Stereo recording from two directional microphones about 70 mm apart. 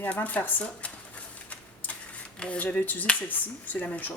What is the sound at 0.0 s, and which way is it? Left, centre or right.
Speech, left.